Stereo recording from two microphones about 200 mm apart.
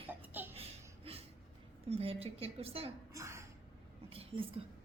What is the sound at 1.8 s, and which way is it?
A woman's voice, 30° right (ahead or behind).